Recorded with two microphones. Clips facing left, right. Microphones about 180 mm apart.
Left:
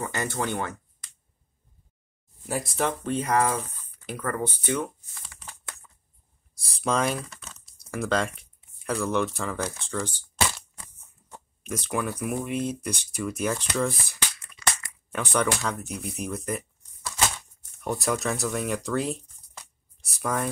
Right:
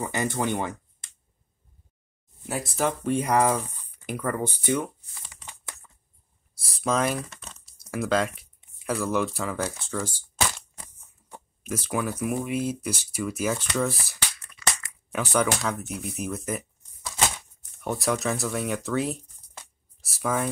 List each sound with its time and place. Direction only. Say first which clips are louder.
0.0 s speech: right 2 dB; 15° right (ahead or behind)
2.4 s speech: right 1 dB; centre (ahead or behind)
6.8 s speech: right 1 dB; centre (ahead or behind)
10.8 s a sound: right 1 dB; 15° right (ahead or behind)
11.6 s speech: right 1 dB; 5° right (ahead or behind)
15.1 s speech: right 1 dB; 5° right (ahead or behind)
17.7 s speech: right 1 dB; centre (ahead or behind)